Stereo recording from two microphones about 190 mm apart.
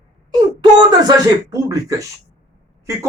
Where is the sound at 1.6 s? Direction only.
15° right (ahead or behind).